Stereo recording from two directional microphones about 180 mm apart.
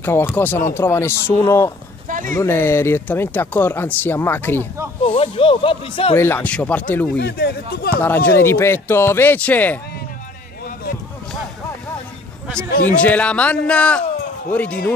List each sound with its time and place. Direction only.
0.0 s speech: 10° left (ahead or behind)
2.0 s a sound: 50° right (ahead or behind)
2.3 s speech: 15° left (ahead or behind)
5.0 s speech: 30° left (ahead or behind)
6.1 s speech: 10° left (ahead or behind)
7.2 s speech: 65° left (ahead or behind)
8.4 s speech: 15° left (ahead or behind)
12.8 s speech: 10° left (ahead or behind)